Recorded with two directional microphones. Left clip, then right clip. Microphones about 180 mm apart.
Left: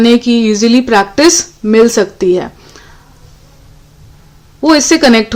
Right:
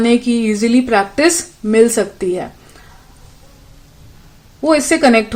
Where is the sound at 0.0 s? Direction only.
30° left (ahead or behind).